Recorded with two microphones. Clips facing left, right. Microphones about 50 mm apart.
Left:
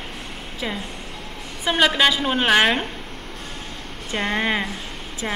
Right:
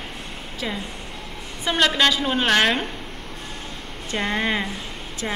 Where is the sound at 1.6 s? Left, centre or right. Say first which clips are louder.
Left 1 dB; centre.